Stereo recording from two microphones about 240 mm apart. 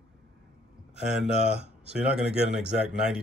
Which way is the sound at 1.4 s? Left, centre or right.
Right.